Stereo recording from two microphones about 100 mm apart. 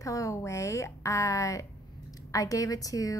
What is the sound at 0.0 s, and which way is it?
A woman's voice, 30° left (ahead or behind).